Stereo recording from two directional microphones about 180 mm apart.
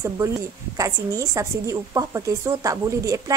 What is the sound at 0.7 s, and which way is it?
A woman's voice, 20° right (ahead or behind).